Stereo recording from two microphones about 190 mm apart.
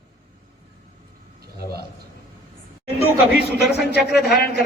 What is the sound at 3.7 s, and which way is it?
Speech, 60° left (ahead or behind).